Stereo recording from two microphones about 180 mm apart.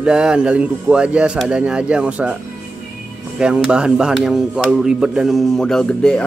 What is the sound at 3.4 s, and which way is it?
Speech, 5° right (ahead or behind).